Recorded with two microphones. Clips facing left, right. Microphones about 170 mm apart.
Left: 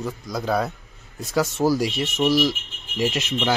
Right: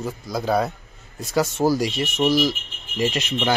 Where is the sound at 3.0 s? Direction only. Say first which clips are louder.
Right 1 dB; 5° left (ahead or behind).